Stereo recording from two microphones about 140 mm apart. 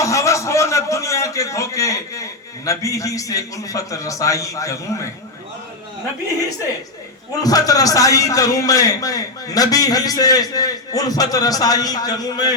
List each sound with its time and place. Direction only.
0.0 s a man's voice: 20° left (ahead or behind)
7.3 s a man's voice: 25° left (ahead or behind)